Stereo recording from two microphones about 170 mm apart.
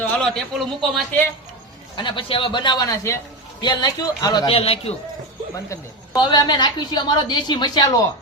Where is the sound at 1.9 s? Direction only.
30° left (ahead or behind).